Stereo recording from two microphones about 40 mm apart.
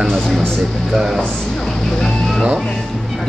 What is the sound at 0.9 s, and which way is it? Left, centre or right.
Speech, centre.